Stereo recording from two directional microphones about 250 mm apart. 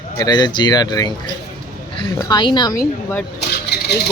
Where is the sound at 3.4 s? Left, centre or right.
Left.